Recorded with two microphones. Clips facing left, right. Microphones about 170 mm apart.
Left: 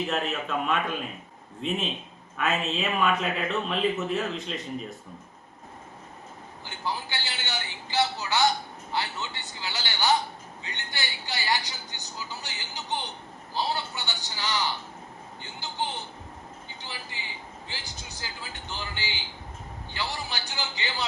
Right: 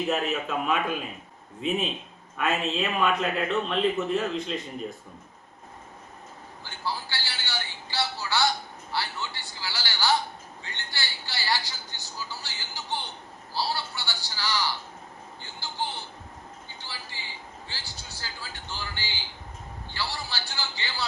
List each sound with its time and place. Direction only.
0.1 s speech: 5° right (ahead or behind)
6.7 s a woman's voice: 20° left (ahead or behind)